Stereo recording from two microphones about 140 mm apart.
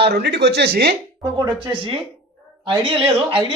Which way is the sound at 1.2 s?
35° right (ahead or behind).